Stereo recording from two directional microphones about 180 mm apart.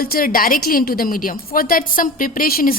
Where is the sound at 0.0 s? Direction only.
55° left (ahead or behind).